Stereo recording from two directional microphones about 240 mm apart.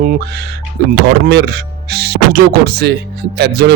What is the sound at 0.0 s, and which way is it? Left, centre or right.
A man's voice, right.